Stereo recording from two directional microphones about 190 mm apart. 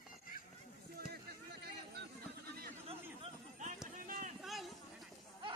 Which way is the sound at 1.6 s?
60° right (ahead or behind).